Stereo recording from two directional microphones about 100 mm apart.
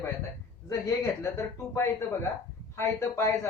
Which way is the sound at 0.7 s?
30° left (ahead or behind).